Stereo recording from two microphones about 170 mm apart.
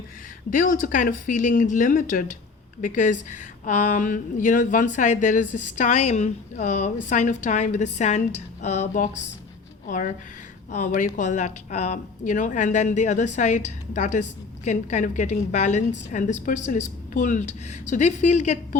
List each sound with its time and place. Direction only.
0.5 s a woman's voice: 50° left (ahead or behind)